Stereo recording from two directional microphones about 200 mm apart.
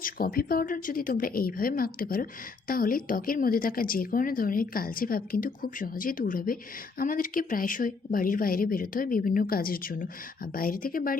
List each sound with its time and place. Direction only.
0.0 s speech: 45° left (ahead or behind)